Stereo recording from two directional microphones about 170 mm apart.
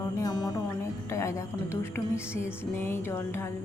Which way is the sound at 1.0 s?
15° left (ahead or behind).